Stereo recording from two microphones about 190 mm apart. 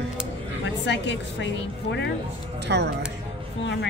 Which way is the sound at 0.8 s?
70° left (ahead or behind).